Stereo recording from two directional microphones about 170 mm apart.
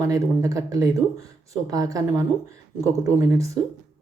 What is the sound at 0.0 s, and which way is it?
Speech, 20° right (ahead or behind).